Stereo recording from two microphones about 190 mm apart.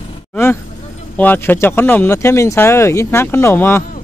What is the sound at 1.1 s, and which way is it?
Speech, 10° left (ahead or behind).